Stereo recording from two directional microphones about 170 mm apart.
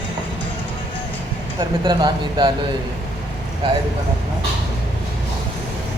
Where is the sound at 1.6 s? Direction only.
25° right (ahead or behind).